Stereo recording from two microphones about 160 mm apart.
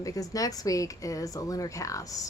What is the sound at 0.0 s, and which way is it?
Speech, 20° left (ahead or behind).